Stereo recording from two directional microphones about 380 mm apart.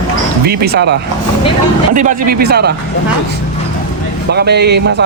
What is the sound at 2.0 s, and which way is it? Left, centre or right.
Speech, right.